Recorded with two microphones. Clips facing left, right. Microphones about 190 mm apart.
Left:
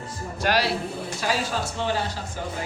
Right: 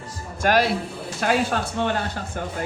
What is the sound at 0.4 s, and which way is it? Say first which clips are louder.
Speech: right 4 dB; 50° right (ahead or behind).